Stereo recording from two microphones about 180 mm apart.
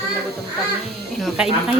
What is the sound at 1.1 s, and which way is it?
Speech, 5° right (ahead or behind).